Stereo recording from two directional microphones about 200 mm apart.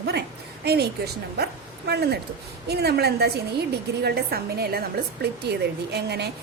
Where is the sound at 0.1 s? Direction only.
55° right (ahead or behind).